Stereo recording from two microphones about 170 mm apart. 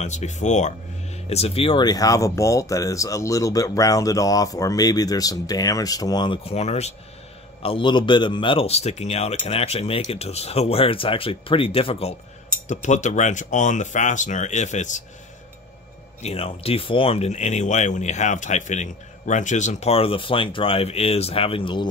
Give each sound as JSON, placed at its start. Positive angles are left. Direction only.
{"t": 0.0, "sound": "speech", "side_deg": 40}
{"t": 16.2, "sound": "speech", "side_deg": 35}